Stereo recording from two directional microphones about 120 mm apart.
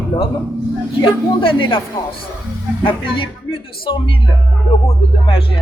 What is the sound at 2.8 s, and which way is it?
A man's voice, 45° left (ahead or behind).